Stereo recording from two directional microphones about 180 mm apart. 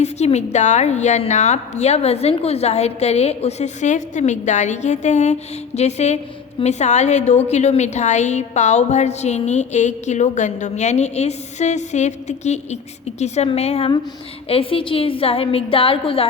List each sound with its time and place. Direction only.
0.0 s a woman's voice: 40° left (ahead or behind)